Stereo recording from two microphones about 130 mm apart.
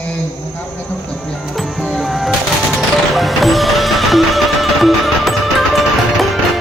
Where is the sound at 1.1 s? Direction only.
5° left (ahead or behind).